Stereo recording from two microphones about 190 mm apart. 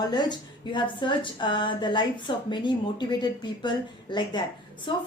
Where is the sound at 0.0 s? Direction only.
20° left (ahead or behind).